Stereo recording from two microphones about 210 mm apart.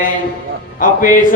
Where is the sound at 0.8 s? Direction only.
40° left (ahead or behind).